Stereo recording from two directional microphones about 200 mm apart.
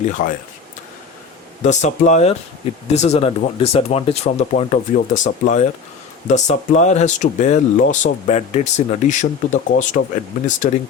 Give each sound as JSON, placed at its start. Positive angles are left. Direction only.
{"t": 0.0, "sound": "speech", "side_deg": 40}
{"t": 1.6, "sound": "speech", "side_deg": 35}